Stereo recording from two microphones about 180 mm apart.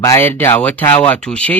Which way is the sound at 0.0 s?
15° left (ahead or behind).